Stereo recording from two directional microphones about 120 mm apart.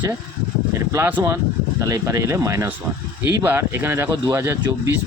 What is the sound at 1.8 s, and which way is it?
Speech, 25° right (ahead or behind).